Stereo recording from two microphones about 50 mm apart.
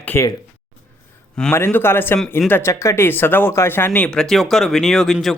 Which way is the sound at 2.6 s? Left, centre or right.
Left.